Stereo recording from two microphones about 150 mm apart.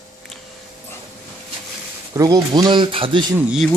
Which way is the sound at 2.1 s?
25° right (ahead or behind).